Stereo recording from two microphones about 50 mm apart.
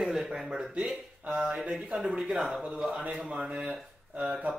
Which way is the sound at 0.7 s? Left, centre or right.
Right.